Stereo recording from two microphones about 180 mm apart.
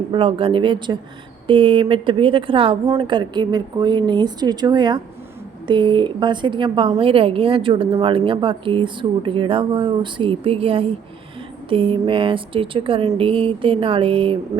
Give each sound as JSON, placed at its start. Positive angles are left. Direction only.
{"t": 0.1, "sound": "a woman's voice", "side_deg": -30}